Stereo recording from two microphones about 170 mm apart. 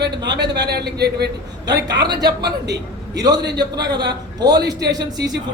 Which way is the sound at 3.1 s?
25° right (ahead or behind).